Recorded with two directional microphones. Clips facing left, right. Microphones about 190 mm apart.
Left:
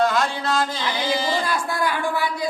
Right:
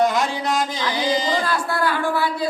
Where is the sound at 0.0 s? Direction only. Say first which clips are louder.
Right 1 dB; 20° right (ahead or behind).